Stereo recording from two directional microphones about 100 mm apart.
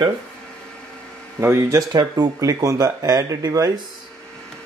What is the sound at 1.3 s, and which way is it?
Speech, 30° right (ahead or behind).